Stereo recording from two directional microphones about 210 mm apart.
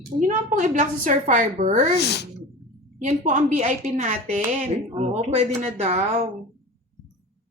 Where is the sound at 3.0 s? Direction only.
35° right (ahead or behind).